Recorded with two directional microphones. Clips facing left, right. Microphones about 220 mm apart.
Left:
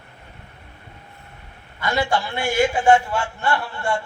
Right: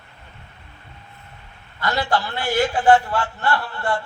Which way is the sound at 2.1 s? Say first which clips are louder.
Even; 10° left (ahead or behind).